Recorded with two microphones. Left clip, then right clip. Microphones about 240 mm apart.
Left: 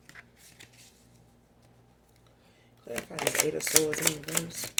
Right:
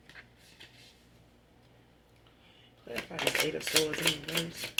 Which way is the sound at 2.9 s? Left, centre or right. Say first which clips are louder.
Left 1 dB; left.